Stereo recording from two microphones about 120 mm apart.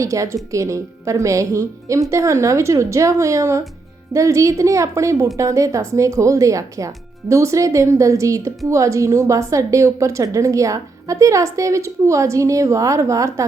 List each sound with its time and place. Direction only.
0.0 s speech: 25° right (ahead or behind)